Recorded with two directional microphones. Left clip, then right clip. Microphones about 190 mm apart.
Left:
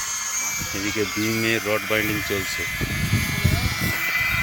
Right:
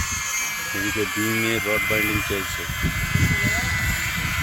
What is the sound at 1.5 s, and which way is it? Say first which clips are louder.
Speech: right 1 dB; 10° left (ahead or behind).